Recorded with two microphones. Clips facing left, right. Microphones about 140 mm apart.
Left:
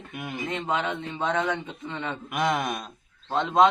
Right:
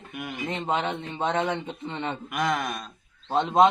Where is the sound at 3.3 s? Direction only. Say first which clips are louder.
Right 1 dB; 20° right (ahead or behind).